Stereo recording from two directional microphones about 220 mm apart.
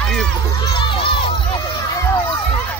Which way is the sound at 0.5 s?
20° left (ahead or behind).